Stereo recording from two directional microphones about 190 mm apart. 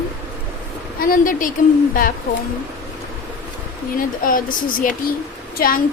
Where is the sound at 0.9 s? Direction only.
50° left (ahead or behind).